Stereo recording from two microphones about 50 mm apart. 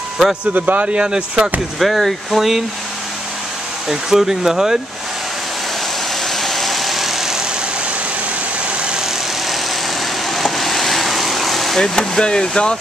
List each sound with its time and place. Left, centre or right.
0.5 s speech: right
0.8 s speech: centre
1.8 s speech: centre
3.9 s speech: centre
6.2 s vehicle: centre
10.3 s vehicle: centre
11.8 s speech: centre